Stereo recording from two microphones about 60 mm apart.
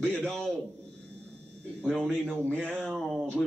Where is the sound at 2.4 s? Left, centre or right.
Left.